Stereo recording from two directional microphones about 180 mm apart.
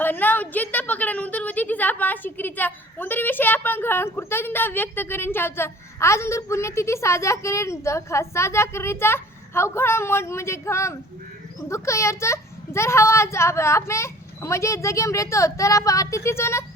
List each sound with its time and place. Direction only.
0.0 s a woman's voice: 10° left (ahead or behind)